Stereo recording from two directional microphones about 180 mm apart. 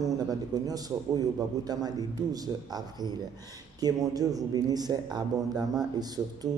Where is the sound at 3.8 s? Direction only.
20° right (ahead or behind).